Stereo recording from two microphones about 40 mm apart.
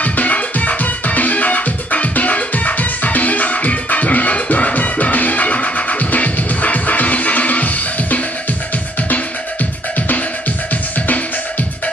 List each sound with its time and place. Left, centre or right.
0.0 s music: left
9.9 s music: left